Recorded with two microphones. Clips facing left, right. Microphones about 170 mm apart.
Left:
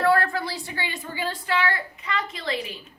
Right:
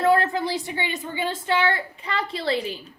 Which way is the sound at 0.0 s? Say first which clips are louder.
Right 2 dB; 20° right (ahead or behind).